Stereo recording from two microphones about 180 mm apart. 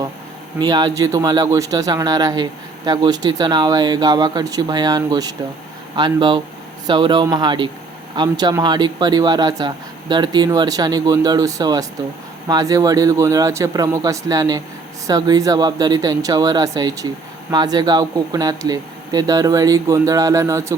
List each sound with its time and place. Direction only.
0.6 s speech: 20° right (ahead or behind)